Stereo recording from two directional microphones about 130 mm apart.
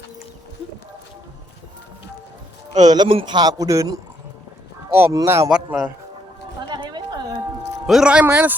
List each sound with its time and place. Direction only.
2.8 s a man's voice: 30° right (ahead or behind)
5.5 s a man's voice: 5° right (ahead or behind)
6.7 s a sound: 35° right (ahead or behind)
7.9 s speech: 5° right (ahead or behind)